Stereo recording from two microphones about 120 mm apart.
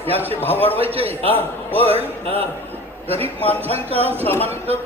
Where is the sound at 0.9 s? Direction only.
55° right (ahead or behind).